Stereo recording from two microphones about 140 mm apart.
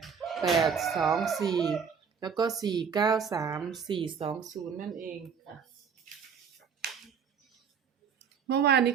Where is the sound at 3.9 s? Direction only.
40° right (ahead or behind).